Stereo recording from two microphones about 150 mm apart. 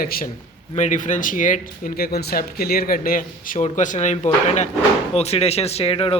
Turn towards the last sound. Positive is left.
turn(degrees=40)  # may be behind; listen again after turning